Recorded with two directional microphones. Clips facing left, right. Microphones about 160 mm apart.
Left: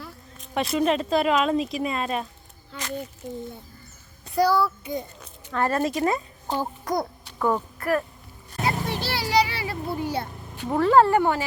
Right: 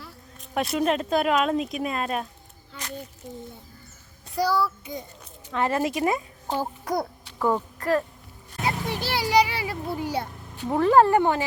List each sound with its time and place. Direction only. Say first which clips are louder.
0.5 s speech: left 1 dB; centre (ahead or behind)
2.7 s speech: left 5 dB; 90° left
4.4 s a child's voice: left 3 dB; 60° left (ahead or behind)
5.5 s speech: left 1 dB; centre (ahead or behind)
5.7 s a child's voice: left 1 dB; 20° right (ahead or behind)
6.5 s a child's voice: left 1 dB; 5° right (ahead or behind)
8.6 s a sound: left 1 dB; 15° right (ahead or behind)
10.7 s speech: even; 20° right (ahead or behind)